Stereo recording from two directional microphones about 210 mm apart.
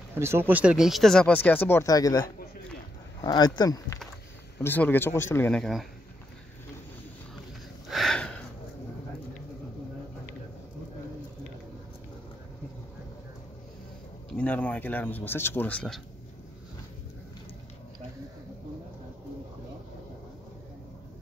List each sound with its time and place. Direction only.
0.1 s speech: 10° right (ahead or behind)
7.9 s a sound: centre (ahead or behind)
14.3 s speech: 5° left (ahead or behind)